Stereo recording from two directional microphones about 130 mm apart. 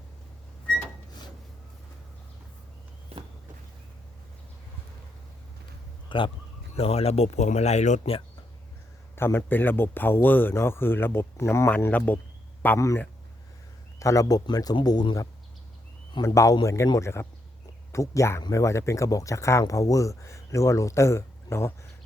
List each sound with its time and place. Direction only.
6.1 s speech: 40° left (ahead or behind); by 8.1 s 60° left (ahead or behind)
9.1 s speech: 20° left (ahead or behind)
11.7 s speech: 10° left (ahead or behind)